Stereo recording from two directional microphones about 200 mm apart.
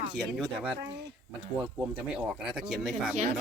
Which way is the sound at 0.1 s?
5° right (ahead or behind).